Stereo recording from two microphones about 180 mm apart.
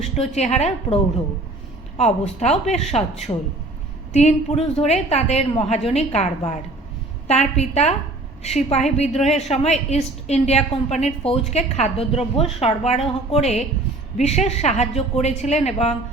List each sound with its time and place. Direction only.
0.0 s a woman's voice: 35° left (ahead or behind)
2.0 s a woman's voice: 40° left (ahead or behind)